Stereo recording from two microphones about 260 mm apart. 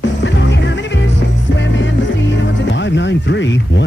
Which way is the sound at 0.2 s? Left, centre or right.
Left.